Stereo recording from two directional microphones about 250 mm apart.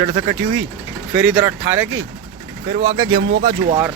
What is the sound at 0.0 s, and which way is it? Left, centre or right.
Speech, centre.